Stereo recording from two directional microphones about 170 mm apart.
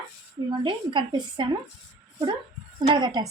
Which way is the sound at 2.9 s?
25° right (ahead or behind).